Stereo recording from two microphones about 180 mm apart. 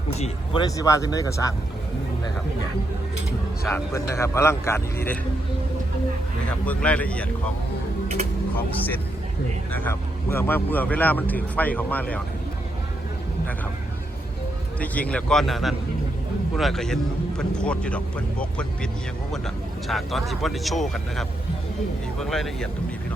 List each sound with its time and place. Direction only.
0.5 s speech: 20° left (ahead or behind)
3.7 s speech: 15° left (ahead or behind)
6.7 s speech: 5° left (ahead or behind)
8.5 s speech: 10° left (ahead or behind)
14.8 s speech: 10° left (ahead or behind)
19.9 s speech: centre (ahead or behind)